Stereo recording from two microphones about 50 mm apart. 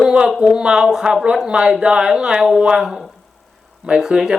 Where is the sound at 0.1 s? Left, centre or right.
Centre.